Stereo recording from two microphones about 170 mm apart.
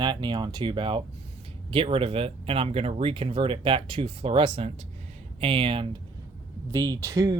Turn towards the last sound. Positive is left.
turn(degrees=-20)  # may be behind; listen again after turning